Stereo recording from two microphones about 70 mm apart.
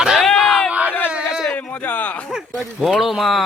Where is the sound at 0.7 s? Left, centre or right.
Right.